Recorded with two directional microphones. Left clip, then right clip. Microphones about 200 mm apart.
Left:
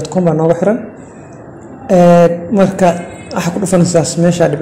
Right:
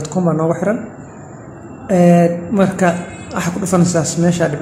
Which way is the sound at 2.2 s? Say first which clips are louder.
Left 5 dB; 15° left (ahead or behind).